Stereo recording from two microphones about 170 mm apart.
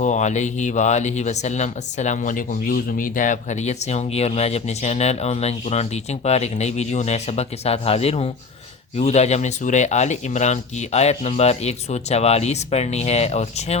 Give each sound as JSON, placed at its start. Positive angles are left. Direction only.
{"t": 0.0, "sound": "speech", "side_deg": 45}